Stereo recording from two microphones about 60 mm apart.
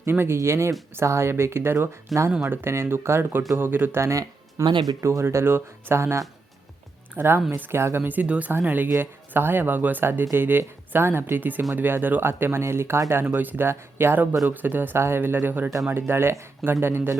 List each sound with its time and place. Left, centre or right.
0.0 s speech: right
2.1 s speech: centre
2.5 s speech: right
4.0 s speech: right
5.0 s speech: right
7.8 s speech: right
8.0 s speech: right
13.2 s speech: right